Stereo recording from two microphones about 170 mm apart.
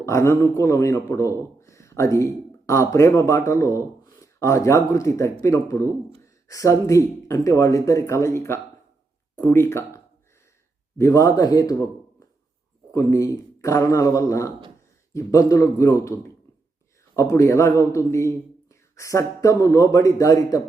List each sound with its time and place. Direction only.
0.0 s a man's voice: 15° left (ahead or behind)
12.9 s a man's voice: 20° left (ahead or behind)
17.2 s a man's voice: 20° left (ahead or behind)